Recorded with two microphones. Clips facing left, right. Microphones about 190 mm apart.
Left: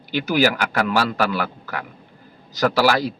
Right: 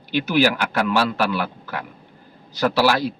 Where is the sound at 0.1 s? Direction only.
40° left (ahead or behind).